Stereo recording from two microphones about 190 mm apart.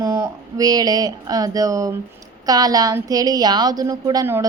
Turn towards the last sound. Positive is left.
turn(degrees=-15)  # may be behind; listen again after turning